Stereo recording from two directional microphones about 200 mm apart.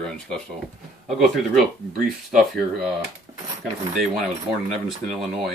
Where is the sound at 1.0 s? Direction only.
Centre (ahead or behind).